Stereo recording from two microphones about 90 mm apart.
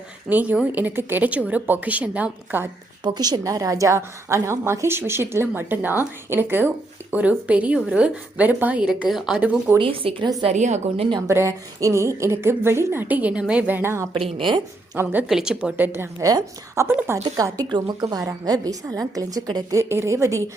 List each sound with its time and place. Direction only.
0.3 s a woman's voice: 15° right (ahead or behind)
3.0 s a woman's voice: 55° right (ahead or behind); by 8.9 s 20° right (ahead or behind)
8.9 s a woman's voice: 5° right (ahead or behind)
9.7 s speech: 80° right
11.3 s a woman's voice: 30° right (ahead or behind)
14.1 s speech: 75° right (ahead or behind)
15.0 s a woman's voice: 25° right (ahead or behind)
15.3 s a woman's voice: 5° right (ahead or behind)
15.8 s a woman's voice: 25° right (ahead or behind)
16.2 s a woman's voice: 35° right (ahead or behind)
17.7 s a woman's voice: 55° right (ahead or behind)
18.0 s a woman's voice: 40° right (ahead or behind)
19.7 s a woman's voice: 30° right (ahead or behind)